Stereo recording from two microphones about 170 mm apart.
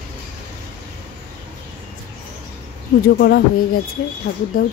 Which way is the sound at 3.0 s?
70° left (ahead or behind).